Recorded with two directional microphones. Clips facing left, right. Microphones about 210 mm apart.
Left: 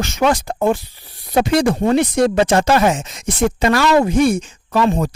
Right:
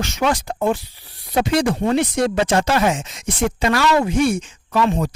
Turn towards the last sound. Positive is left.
turn(degrees=40)  # may be behind; listen again after turning